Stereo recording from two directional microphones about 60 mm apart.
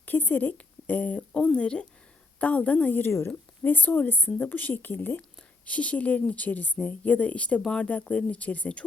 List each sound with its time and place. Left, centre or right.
0.0 s a woman's voice: left
3.0 s a woman's voice: left
3.6 s a woman's voice: left